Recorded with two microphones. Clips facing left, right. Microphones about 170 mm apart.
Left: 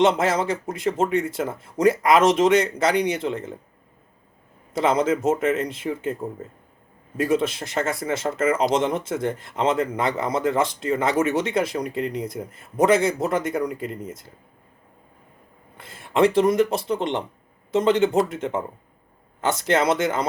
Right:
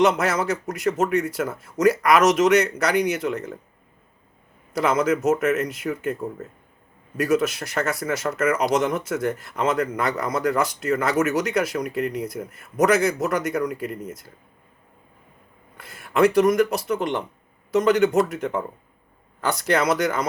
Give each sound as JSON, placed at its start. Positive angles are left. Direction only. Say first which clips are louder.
{"t": 0.0, "sound": "speech", "louder": "left 1 dB", "side_deg": 25}
{"t": 4.7, "sound": "speech", "louder": "even", "side_deg": 25}
{"t": 15.8, "sound": "speech", "louder": "even", "side_deg": 25}